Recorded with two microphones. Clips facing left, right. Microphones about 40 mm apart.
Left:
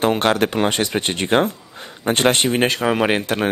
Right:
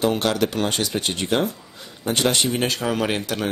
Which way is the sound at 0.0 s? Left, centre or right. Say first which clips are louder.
Left 3 dB; left.